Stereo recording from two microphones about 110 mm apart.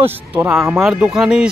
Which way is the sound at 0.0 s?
20° right (ahead or behind).